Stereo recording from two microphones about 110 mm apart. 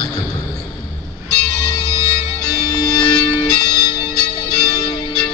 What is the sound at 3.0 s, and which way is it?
Music, 40° left (ahead or behind).